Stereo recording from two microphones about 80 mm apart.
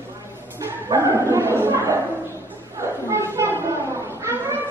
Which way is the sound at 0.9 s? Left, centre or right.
Right.